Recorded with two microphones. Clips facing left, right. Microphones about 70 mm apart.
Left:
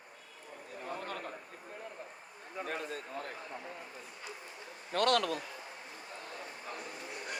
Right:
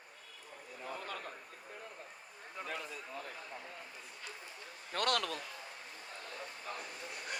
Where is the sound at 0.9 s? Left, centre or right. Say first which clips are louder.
Left 3 dB; left.